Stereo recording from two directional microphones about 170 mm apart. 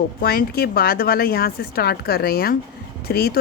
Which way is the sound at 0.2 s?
60° left (ahead or behind).